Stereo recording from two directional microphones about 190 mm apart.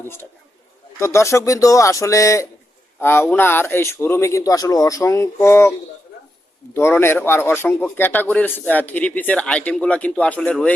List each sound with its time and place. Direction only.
0.0 s a man's voice: 10° left (ahead or behind)
6.7 s a man's voice: 10° left (ahead or behind)